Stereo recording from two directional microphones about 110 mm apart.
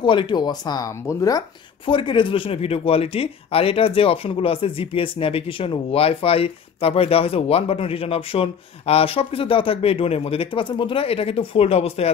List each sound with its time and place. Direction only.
0.0 s speech: 45° left (ahead or behind)
1.9 s speech: 45° left (ahead or behind); by 12.1 s 65° left (ahead or behind)